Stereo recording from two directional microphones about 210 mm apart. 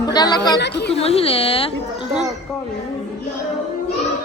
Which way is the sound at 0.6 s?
55° left (ahead or behind).